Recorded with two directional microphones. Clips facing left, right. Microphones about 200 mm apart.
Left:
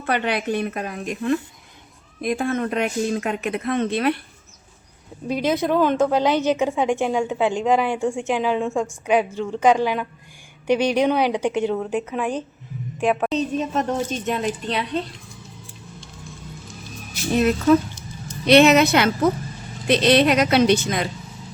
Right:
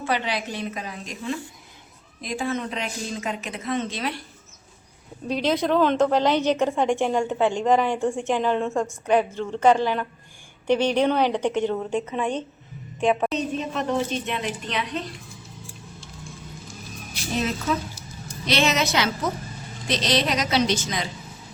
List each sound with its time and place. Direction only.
0.0 s speech: 60° left (ahead or behind)
5.3 s a woman's voice: 10° left (ahead or behind)
13.3 s a woman's voice: 40° left (ahead or behind)
17.3 s speech: 60° left (ahead or behind)